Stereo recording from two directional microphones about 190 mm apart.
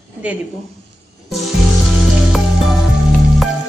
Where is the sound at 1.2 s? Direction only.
Centre (ahead or behind).